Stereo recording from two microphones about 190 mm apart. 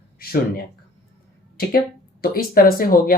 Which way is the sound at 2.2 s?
50° left (ahead or behind).